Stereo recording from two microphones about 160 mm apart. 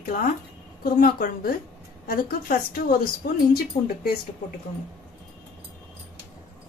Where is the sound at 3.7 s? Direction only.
40° left (ahead or behind).